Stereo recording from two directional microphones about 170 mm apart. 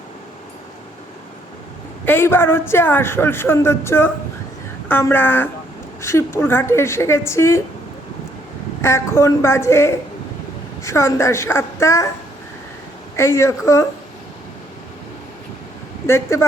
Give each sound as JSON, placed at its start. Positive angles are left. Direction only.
{"t": 2.0, "sound": "a man's voice", "side_deg": 15}
{"t": 8.8, "sound": "a man's voice", "side_deg": 15}
{"t": 13.1, "sound": "a man's voice", "side_deg": 15}
{"t": 16.0, "sound": "a man's voice", "side_deg": 15}